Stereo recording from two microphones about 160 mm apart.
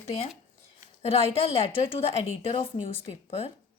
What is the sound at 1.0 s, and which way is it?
A woman's voice, 40° left (ahead or behind).